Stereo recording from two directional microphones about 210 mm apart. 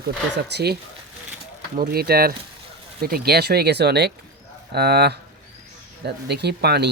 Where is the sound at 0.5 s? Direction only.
50° right (ahead or behind).